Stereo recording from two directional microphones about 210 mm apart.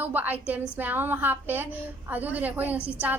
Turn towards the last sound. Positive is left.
turn(degrees=-5)  # may be behind; listen again after turning